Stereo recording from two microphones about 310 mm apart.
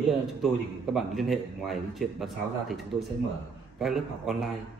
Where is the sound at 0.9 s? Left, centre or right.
Centre.